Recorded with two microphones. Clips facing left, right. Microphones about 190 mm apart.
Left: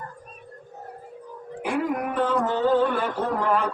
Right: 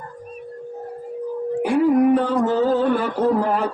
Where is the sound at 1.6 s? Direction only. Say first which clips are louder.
Right 10 dB; 35° right (ahead or behind).